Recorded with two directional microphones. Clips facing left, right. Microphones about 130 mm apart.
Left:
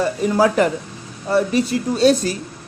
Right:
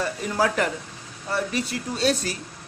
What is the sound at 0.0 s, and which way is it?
A man's voice, 25° left (ahead or behind).